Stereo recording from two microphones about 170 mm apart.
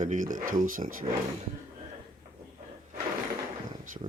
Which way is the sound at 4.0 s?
35° right (ahead or behind).